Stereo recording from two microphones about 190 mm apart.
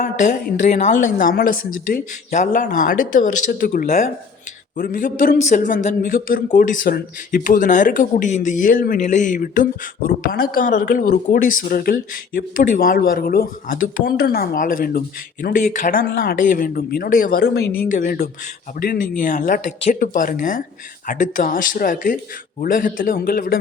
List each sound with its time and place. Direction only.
0.0 s a man's voice: 40° left (ahead or behind); by 17.7 s 60° left (ahead or behind)
17.8 s a man's voice: 50° left (ahead or behind)